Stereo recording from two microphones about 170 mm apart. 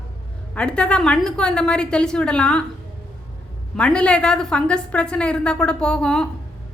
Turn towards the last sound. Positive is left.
turn(degrees=5)  # may be behind; listen again after turning